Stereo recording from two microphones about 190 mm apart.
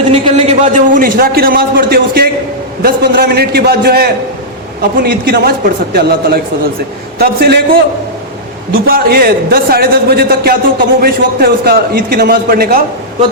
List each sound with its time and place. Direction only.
0.1 s a man's voice: 30° right (ahead or behind); by 7.6 s 55° right (ahead or behind)
8.7 s a man's voice: 50° right (ahead or behind)